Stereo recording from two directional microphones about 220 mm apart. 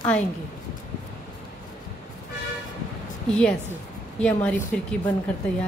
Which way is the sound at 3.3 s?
5° left (ahead or behind).